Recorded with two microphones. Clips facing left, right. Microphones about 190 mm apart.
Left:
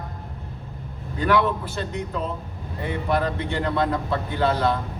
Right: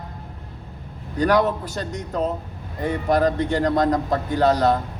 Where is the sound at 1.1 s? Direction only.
40° right (ahead or behind).